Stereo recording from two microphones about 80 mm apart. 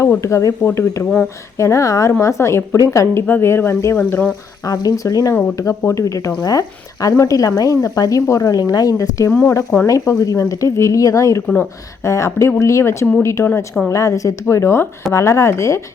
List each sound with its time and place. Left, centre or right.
0.2 s a woman's voice: left
3.2 s a woman's voice: left
3.9 s speech: centre
4.6 s a woman's voice: left
9.8 s speech: left
11.4 s speech: left
12.0 s a woman's voice: left
14.4 s a woman's voice: left